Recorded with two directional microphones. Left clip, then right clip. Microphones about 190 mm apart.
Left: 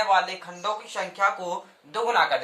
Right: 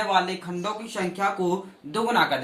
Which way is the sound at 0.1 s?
20° left (ahead or behind).